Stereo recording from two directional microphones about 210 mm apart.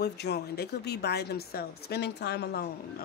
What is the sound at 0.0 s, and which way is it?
Speech, 50° left (ahead or behind).